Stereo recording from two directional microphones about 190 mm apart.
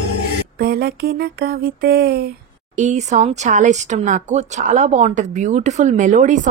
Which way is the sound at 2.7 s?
40° right (ahead or behind).